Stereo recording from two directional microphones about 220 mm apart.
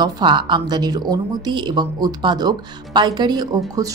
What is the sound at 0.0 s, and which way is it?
Speech, 20° right (ahead or behind).